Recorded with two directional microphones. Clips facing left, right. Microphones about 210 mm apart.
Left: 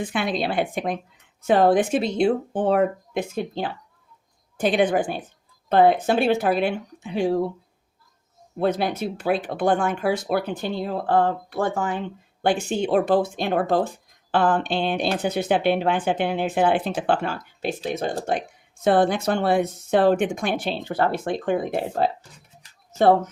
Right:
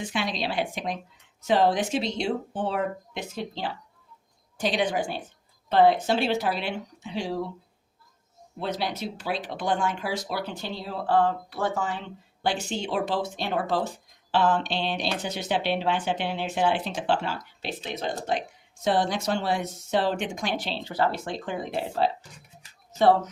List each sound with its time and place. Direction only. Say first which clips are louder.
0.0 s speech: left 5 dB; 55° left (ahead or behind)
8.5 s speech: left 7 dB; 50° left (ahead or behind)